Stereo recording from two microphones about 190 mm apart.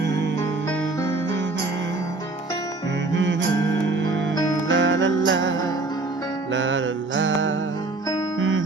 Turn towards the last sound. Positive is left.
turn(degrees=-80)